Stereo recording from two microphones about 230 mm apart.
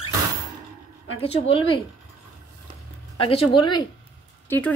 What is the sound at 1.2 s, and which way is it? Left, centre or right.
Speech, left.